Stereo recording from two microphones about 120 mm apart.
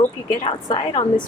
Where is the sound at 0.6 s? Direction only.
40° left (ahead or behind).